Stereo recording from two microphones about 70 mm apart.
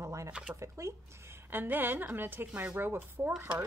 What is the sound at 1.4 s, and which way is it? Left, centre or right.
A woman's voice, right.